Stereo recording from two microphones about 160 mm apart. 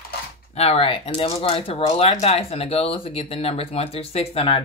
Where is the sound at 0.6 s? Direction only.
35° left (ahead or behind).